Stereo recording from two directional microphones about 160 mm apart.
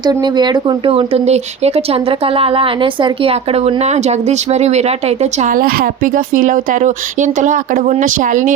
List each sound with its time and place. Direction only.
0.0 s a woman's voice: 25° right (ahead or behind); by 5.5 s 40° right (ahead or behind)
5.5 s speech: 65° right (ahead or behind)